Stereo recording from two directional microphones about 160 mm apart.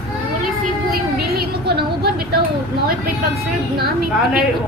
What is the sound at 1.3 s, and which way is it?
Speech, 80° right.